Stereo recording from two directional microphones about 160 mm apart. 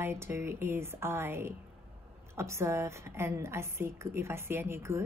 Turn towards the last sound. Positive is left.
turn(degrees=-15)  # may be behind; listen again after turning